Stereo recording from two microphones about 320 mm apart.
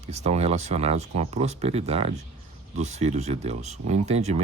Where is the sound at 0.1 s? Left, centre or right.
Centre.